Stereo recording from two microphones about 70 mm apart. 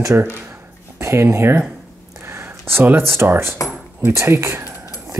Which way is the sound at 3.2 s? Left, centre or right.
Right.